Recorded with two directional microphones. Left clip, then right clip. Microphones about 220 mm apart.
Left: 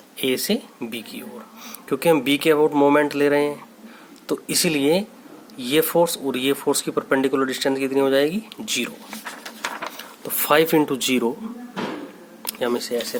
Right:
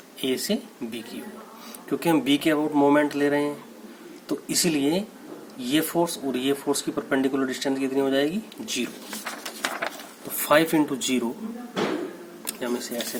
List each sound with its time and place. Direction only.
0.2 s speech: 45° left (ahead or behind)
10.0 s speech: 45° left (ahead or behind)
12.5 s speech: 45° left (ahead or behind)